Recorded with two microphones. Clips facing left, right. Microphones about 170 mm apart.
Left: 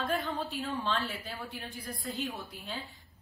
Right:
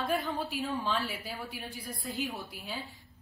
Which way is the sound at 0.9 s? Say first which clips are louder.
Even; centre (ahead or behind).